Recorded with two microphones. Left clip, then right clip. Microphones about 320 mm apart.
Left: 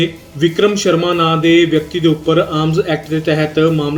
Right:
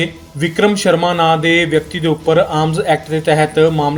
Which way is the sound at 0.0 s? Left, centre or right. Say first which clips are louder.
Left 3 dB; centre.